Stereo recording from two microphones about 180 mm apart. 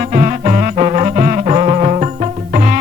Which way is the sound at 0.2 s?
40° right (ahead or behind).